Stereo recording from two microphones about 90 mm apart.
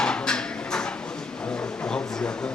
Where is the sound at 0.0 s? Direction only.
10° left (ahead or behind).